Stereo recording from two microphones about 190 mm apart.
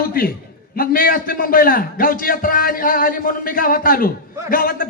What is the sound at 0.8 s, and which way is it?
A man's voice, 50° left (ahead or behind).